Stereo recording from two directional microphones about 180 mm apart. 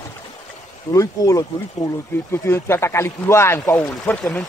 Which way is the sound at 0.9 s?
20° left (ahead or behind).